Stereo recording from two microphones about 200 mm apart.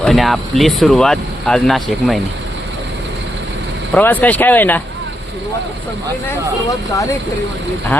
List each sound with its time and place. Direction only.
0.0 s speech: centre (ahead or behind)
3.9 s speech: 10° left (ahead or behind)
6.7 s speech: 15° left (ahead or behind)